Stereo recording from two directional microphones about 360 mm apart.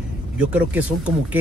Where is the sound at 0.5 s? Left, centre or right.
Centre.